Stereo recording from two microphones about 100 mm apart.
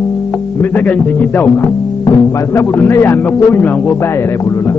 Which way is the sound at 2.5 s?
25° left (ahead or behind).